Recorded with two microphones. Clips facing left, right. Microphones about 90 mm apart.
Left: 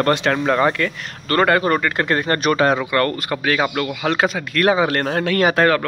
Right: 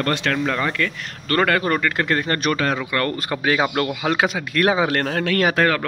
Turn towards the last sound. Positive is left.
turn(degrees=15)  # may be behind; listen again after turning